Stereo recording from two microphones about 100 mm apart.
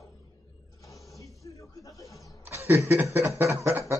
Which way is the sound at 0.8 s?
35° left (ahead or behind).